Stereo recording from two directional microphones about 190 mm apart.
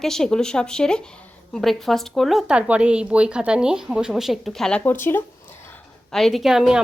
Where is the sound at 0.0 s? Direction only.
Centre (ahead or behind).